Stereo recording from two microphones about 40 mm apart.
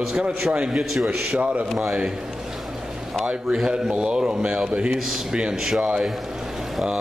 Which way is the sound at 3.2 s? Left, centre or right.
Right.